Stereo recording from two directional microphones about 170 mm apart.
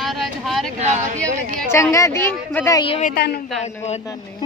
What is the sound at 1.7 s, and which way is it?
Speech, 15° left (ahead or behind).